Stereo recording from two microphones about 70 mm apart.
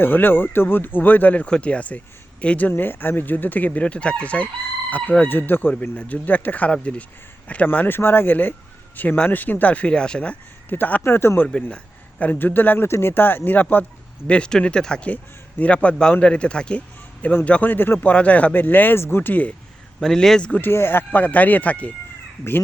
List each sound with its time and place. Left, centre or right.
0.0 s a man's voice: left
10.7 s speech: left
11.4 s a man's voice: centre
12.2 s speech: left
14.3 s a man's voice: centre
18.1 s speech: centre
20.0 s a man's voice: centre
20.5 s speech: left